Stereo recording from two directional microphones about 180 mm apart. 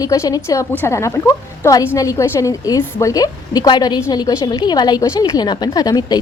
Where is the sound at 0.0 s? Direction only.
20° left (ahead or behind).